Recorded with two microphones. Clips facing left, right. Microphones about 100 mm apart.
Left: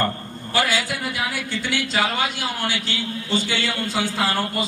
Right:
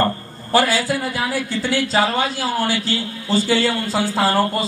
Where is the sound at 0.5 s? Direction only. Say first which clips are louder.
Right 6 dB; 35° right (ahead or behind).